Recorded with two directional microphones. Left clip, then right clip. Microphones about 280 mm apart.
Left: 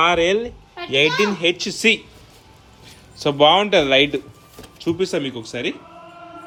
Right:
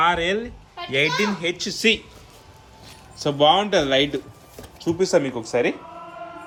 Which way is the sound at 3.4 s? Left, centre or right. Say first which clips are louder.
Left 3 dB; centre.